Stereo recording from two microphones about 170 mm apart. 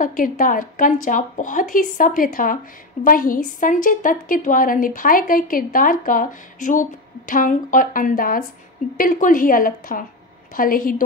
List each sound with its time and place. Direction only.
0.0 s a woman's voice: 55° left (ahead or behind)